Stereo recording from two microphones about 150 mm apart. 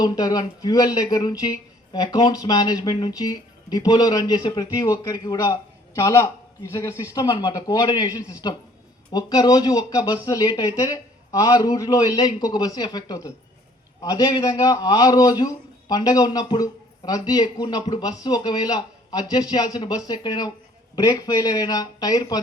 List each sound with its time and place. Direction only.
0.0 s speech: 25° left (ahead or behind)